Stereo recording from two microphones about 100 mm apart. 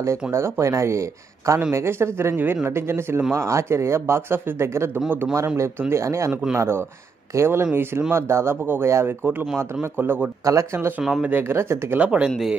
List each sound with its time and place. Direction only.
0.0 s a man's voice: 30° right (ahead or behind)
10.4 s speech: 30° right (ahead or behind)
11.0 s speech: 10° right (ahead or behind)
11.3 s a man's voice: 25° right (ahead or behind)
12.0 s speech: 10° right (ahead or behind)
12.3 s speech: centre (ahead or behind)